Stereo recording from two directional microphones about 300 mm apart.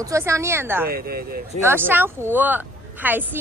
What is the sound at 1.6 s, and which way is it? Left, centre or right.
Speech, centre.